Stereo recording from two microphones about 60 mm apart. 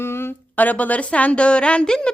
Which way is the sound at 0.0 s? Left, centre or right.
Left.